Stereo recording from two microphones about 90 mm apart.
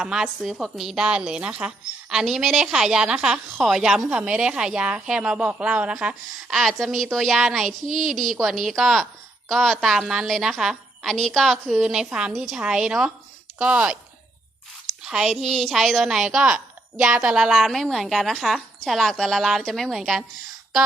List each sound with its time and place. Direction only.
0.0 s a woman's voice: 5° right (ahead or behind)
15.0 s a woman's voice: 5° right (ahead or behind)